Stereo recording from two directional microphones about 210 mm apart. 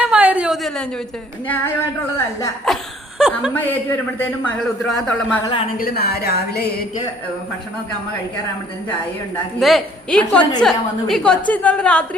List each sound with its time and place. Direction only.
0.0 s a sound: 5° right (ahead or behind)
2.7 s a woman's voice: centre (ahead or behind)
3.2 s chuckle: 5° right (ahead or behind)
4.4 s a woman's voice: centre (ahead or behind)
5.7 s speech: 45° left (ahead or behind)
9.6 s a woman's voice: centre (ahead or behind)